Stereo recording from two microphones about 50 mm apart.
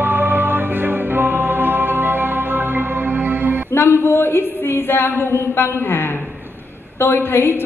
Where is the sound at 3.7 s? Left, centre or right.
Left.